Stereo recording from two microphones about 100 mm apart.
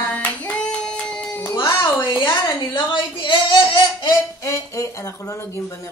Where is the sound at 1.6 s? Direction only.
50° left (ahead or behind).